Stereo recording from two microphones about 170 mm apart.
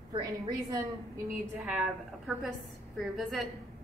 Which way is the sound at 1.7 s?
Centre (ahead or behind).